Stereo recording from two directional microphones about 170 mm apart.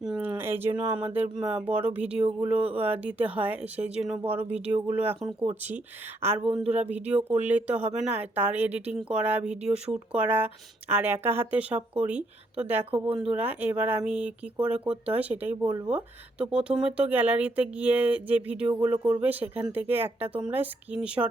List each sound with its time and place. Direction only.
0.0 s a sound: 5° right (ahead or behind)
0.9 s speech: 10° right (ahead or behind)
12.8 s speech: 35° right (ahead or behind)
13.1 s speech: 5° right (ahead or behind)